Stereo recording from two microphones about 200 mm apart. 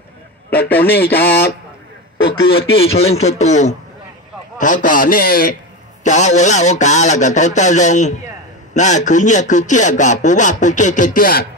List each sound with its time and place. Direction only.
0.7 s speech: 10° left (ahead or behind)
2.2 s a sound: 70° left (ahead or behind)
2.8 s a man's voice: 30° left (ahead or behind)